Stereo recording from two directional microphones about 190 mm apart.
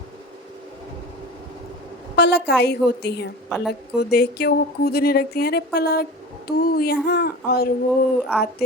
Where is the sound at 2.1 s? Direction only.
60° left (ahead or behind).